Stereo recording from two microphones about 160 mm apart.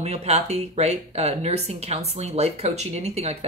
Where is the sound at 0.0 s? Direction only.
40° right (ahead or behind).